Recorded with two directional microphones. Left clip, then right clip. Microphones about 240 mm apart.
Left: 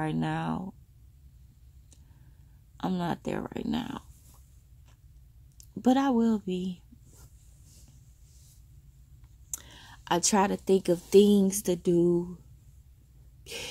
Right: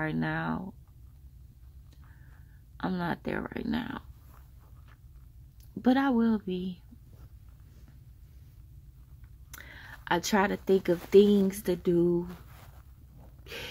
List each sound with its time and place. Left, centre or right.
0.0 s speech: centre
2.8 s speech: centre
5.6 s speech: centre
9.5 s a woman's voice: centre
13.4 s a sound: centre